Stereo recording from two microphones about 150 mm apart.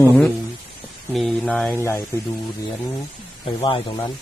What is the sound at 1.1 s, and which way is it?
Speech, centre (ahead or behind).